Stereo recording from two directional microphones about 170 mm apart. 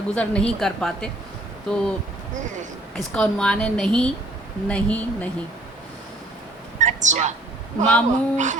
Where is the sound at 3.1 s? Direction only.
5° left (ahead or behind).